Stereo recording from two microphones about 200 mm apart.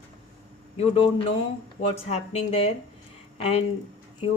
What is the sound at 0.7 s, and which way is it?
Speech, 30° left (ahead or behind).